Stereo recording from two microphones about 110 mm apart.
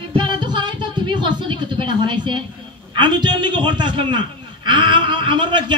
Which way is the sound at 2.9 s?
45° right (ahead or behind).